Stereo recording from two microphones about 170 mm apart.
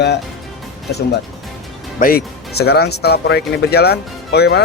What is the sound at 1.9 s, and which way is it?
A man's voice, 60° left (ahead or behind).